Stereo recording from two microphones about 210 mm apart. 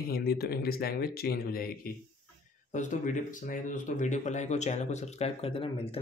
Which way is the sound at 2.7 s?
35° left (ahead or behind).